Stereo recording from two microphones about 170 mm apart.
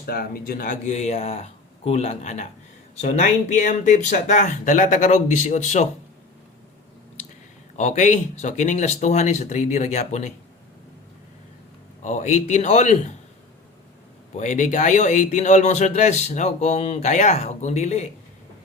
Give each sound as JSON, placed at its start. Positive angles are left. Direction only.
{"t": 0.0, "sound": "a man's voice", "side_deg": 60}
{"t": 7.8, "sound": "a man's voice", "side_deg": 45}
{"t": 12.0, "sound": "a man's voice", "side_deg": 45}
{"t": 14.3, "sound": "a man's voice", "side_deg": 45}